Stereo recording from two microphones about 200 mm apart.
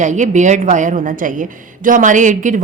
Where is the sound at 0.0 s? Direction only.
35° right (ahead or behind).